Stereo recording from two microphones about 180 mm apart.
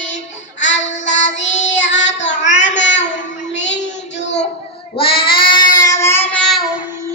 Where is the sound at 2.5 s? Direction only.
40° left (ahead or behind).